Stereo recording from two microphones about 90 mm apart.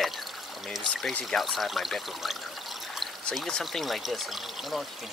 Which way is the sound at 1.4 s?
Centre (ahead or behind).